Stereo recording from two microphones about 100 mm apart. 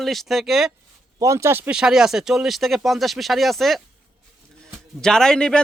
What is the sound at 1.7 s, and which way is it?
Speech, 5° right (ahead or behind).